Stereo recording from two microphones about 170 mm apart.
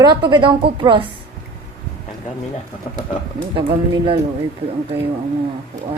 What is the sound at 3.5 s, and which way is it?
Speech, 30° right (ahead or behind).